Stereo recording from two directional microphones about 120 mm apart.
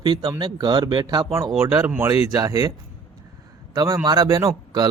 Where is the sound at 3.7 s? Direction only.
35° right (ahead or behind).